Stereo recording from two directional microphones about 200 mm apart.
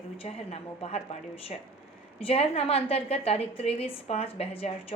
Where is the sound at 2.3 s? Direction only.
30° left (ahead or behind).